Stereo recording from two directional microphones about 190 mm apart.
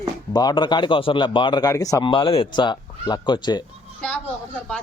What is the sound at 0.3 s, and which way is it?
Speech, 20° left (ahead or behind).